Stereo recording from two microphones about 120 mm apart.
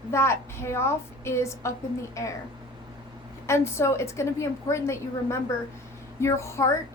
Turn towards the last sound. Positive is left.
turn(degrees=25)  # may be behind; listen again after turning